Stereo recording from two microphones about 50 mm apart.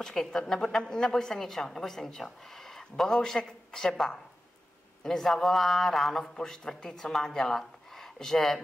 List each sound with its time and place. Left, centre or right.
0.0 s a woman's voice: centre